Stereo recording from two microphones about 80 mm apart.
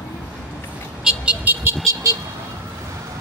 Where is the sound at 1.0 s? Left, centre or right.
Centre.